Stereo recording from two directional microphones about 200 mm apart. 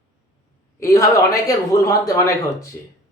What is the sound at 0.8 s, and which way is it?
Speech, 15° left (ahead or behind).